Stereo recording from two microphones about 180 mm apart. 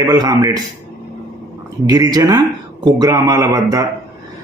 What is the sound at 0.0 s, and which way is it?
Speech, 20° right (ahead or behind).